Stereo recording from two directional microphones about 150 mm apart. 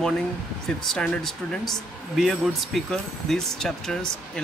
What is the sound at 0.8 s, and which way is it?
Speech, 5° left (ahead or behind).